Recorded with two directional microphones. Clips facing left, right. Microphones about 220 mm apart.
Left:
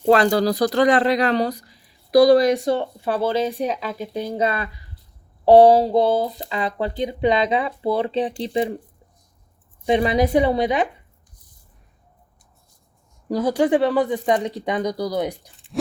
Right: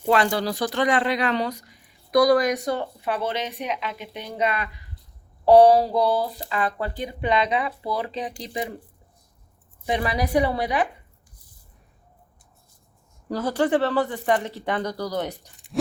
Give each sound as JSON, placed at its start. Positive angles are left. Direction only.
{"t": 0.0, "sound": "speech", "side_deg": 40}
{"t": 9.8, "sound": "speech", "side_deg": 25}
{"t": 13.3, "sound": "speech", "side_deg": 15}